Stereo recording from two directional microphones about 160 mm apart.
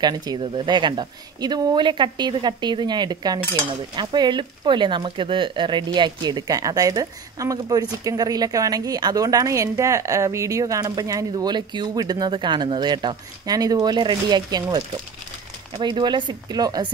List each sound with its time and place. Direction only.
0.0 s a woman's voice: 25° right (ahead or behind)